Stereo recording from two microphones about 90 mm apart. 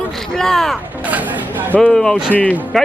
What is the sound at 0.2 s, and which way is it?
Speech, 5° left (ahead or behind).